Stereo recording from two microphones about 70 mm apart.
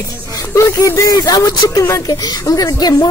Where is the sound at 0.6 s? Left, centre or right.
Left.